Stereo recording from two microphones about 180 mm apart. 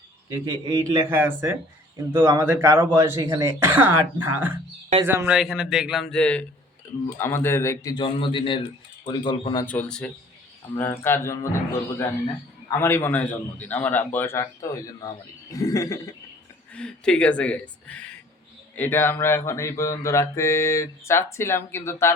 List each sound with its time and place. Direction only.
0.3 s a man's voice: 20° right (ahead or behind); by 8.0 s 15° left (ahead or behind)
8.0 s speech: 30° left (ahead or behind)
9.6 s speech: 5° left (ahead or behind)
12.8 s speech: 10° left (ahead or behind)
16.7 s speech: 5° left (ahead or behind)